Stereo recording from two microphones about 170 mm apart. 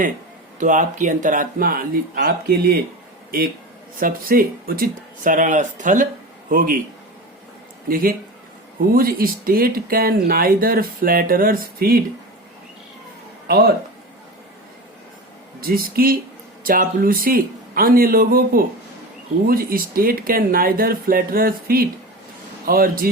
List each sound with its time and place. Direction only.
0.6 s speech: 50° right (ahead or behind); by 2.7 s 65° right (ahead or behind)
4.0 s speech: 55° right (ahead or behind)
7.9 s speech: 55° right (ahead or behind)
13.5 s speech: 60° right (ahead or behind)
15.6 s speech: 60° right (ahead or behind)